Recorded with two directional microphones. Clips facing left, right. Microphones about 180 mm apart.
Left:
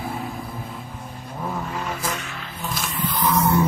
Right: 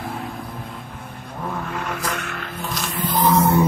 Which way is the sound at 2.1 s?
60° right (ahead or behind).